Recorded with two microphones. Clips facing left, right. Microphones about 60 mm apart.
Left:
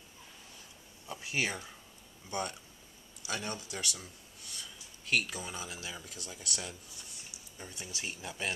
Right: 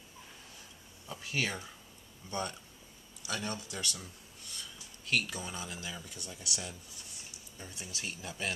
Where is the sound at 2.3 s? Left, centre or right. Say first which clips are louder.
Left 1 dB; left.